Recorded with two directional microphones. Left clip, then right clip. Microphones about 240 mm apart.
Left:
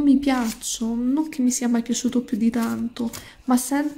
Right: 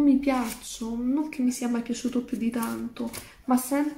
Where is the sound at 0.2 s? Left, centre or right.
Left.